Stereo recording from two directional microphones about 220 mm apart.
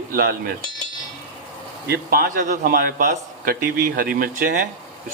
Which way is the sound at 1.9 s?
40° right (ahead or behind).